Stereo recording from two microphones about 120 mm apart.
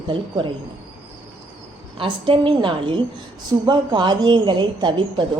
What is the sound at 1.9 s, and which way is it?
A woman's voice, 45° right (ahead or behind).